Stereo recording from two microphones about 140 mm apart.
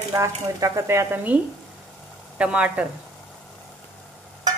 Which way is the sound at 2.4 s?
10° right (ahead or behind).